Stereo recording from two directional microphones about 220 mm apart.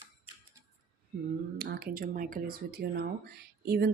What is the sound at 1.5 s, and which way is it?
Speech, 45° right (ahead or behind).